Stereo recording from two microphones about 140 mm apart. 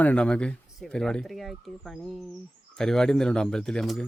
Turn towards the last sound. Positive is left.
turn(degrees=5)  # may be behind; listen again after turning